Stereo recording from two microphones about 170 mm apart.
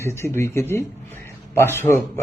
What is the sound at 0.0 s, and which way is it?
A man's voice, 15° left (ahead or behind).